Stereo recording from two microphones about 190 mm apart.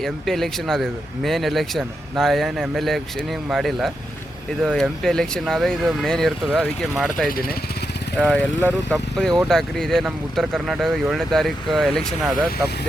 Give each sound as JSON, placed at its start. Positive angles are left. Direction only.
{"t": 0.0, "sound": "speech", "side_deg": 0}
{"t": 7.3, "sound": "speech", "side_deg": 50}
{"t": 8.2, "sound": "speech", "side_deg": 5}